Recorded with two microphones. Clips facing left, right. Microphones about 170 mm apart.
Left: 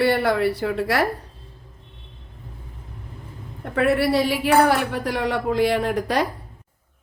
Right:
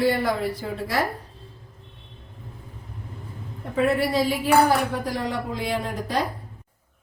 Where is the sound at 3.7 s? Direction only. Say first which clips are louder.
Left 3 dB; 70° left (ahead or behind).